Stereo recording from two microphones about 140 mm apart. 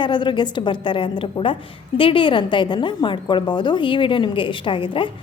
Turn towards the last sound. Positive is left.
turn(degrees=40)  # may be behind; listen again after turning